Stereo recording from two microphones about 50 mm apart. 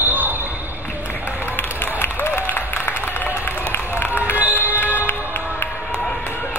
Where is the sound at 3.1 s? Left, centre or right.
Left.